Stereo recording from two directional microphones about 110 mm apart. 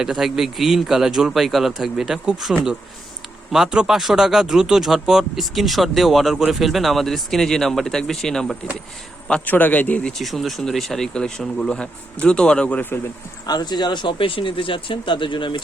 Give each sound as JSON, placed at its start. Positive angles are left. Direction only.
{"t": 0.0, "sound": "speech", "side_deg": -5}
{"t": 13.5, "sound": "speech", "side_deg": 40}